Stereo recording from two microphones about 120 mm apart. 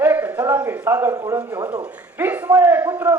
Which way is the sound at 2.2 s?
20° right (ahead or behind).